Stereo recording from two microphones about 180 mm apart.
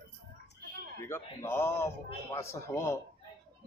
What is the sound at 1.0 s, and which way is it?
A man's voice, 15° left (ahead or behind).